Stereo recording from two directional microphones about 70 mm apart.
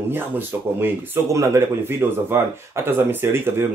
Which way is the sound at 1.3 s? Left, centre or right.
Right.